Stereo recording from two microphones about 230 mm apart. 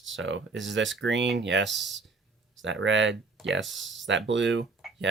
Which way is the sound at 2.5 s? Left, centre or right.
Right.